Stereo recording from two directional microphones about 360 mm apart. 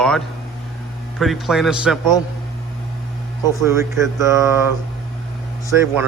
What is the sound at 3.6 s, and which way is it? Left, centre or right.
Speech, centre.